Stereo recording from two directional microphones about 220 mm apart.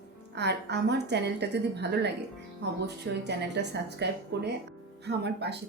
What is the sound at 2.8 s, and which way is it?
A woman's voice, 50° right (ahead or behind).